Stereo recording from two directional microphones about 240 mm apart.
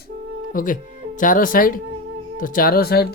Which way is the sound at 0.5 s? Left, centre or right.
Left.